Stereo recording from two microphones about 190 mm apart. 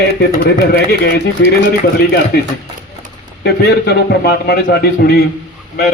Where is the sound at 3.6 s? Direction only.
60° left (ahead or behind).